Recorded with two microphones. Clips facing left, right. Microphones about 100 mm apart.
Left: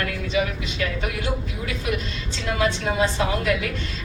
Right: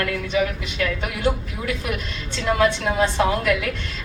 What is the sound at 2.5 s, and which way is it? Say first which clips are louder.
Speech: right 3 dB; 55° right (ahead or behind).